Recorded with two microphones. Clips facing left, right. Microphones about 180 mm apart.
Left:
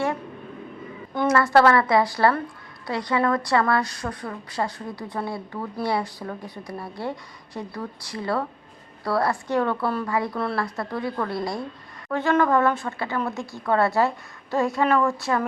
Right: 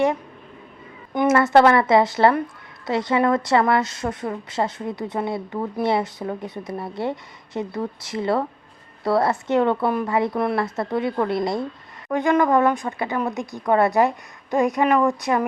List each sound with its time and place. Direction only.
1.1 s a woman's voice: 20° right (ahead or behind)